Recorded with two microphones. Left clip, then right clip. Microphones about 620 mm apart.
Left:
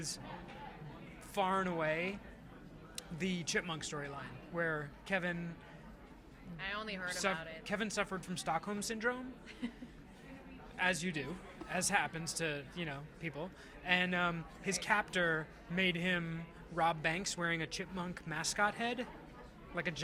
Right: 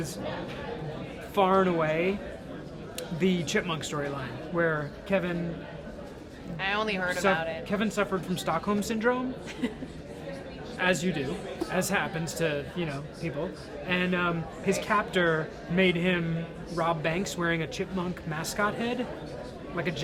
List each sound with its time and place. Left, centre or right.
1.4 s speech: left
3.2 s speech: left
6.6 s speech: left
10.8 s speech: left